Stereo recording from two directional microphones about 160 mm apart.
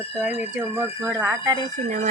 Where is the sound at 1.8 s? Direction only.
50° right (ahead or behind).